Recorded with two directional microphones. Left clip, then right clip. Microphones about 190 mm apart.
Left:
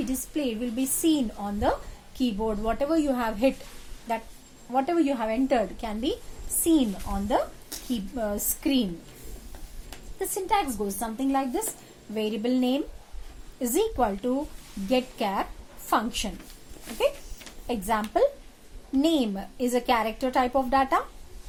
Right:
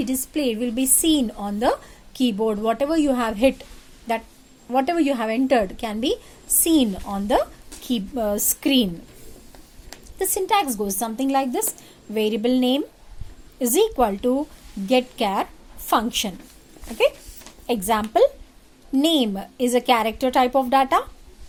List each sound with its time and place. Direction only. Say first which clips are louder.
0.0 s a woman's voice: right 6 dB; 40° right (ahead or behind)
10.2 s a woman's voice: right 5 dB; 50° right (ahead or behind)
17.7 s a woman's voice: right 6 dB; 45° right (ahead or behind)